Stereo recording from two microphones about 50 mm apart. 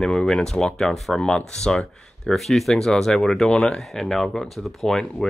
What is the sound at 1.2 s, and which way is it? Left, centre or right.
Speech, centre.